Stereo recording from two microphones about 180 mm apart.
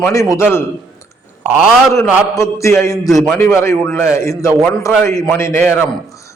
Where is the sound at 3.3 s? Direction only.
15° left (ahead or behind).